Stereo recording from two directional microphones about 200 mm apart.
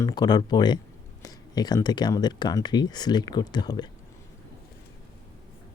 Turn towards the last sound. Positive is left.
turn(degrees=20)  # may be behind; listen again after turning